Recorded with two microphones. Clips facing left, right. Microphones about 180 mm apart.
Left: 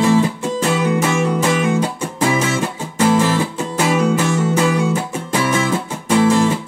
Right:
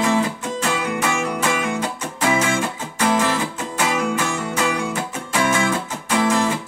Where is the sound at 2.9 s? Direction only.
30° left (ahead or behind).